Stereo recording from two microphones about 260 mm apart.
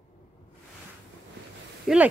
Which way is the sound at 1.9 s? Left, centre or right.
Centre.